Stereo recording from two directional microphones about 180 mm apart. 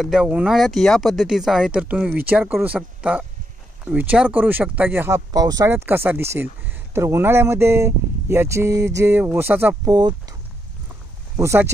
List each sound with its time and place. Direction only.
0.0 s speech: 5° right (ahead or behind)
9.8 s speech: 20° right (ahead or behind)
11.3 s speech: 15° right (ahead or behind)